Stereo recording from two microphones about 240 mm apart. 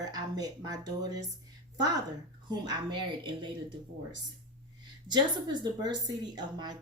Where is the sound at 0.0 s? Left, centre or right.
Centre.